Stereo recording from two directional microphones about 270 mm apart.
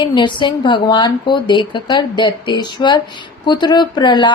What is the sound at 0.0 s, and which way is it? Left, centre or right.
Speech, centre.